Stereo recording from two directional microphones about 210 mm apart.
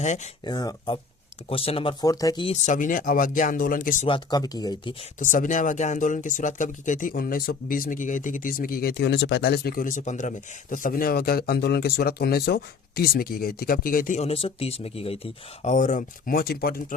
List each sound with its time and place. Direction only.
0.0 s speech: 35° left (ahead or behind)
0.4 s speech: 20° left (ahead or behind); by 3.9 s 40° left (ahead or behind)
4.0 s speech: 20° left (ahead or behind)
5.2 s speech: 40° left (ahead or behind)